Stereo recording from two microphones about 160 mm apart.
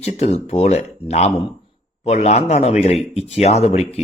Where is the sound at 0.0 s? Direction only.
40° left (ahead or behind).